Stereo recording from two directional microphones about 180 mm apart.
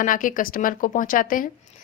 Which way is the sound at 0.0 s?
50° left (ahead or behind).